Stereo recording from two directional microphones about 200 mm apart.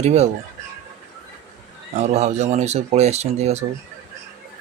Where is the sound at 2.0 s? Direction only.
35° right (ahead or behind).